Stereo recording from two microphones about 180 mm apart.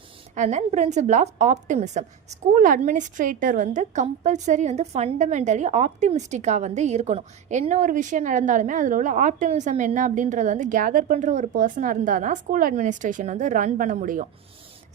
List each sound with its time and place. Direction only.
0.3 s a woman's voice: 40° right (ahead or behind)